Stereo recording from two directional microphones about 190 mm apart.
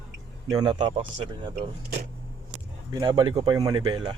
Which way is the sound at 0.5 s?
20° right (ahead or behind).